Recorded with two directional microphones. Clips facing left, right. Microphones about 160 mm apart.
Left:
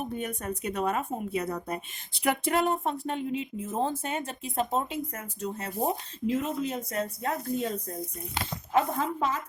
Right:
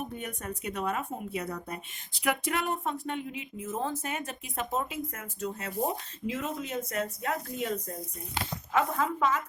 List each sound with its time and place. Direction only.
0.2 s a woman's voice: 35° left (ahead or behind)
8.7 s a woman's voice: 35° left (ahead or behind)